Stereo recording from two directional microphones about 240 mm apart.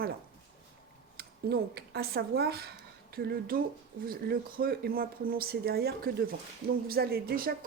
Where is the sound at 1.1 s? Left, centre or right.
Right.